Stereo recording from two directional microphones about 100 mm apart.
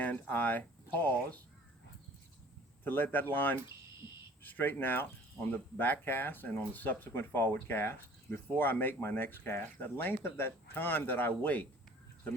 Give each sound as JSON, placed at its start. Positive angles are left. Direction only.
{"t": 0.0, "sound": "speech", "side_deg": 15}
{"t": 2.8, "sound": "speech", "side_deg": 20}